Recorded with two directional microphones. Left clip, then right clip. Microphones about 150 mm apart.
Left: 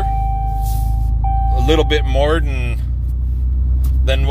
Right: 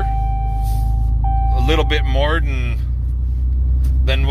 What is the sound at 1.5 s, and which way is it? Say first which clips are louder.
Speech: left 4 dB; 25° left (ahead or behind).